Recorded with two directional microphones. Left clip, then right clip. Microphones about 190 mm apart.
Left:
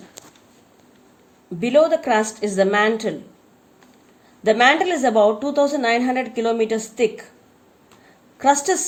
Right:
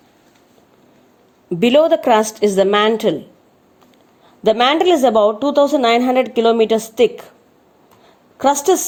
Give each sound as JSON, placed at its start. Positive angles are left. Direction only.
{"t": 1.5, "sound": "a woman's voice", "side_deg": -45}
{"t": 4.4, "sound": "a woman's voice", "side_deg": -45}
{"t": 8.4, "sound": "a woman's voice", "side_deg": -35}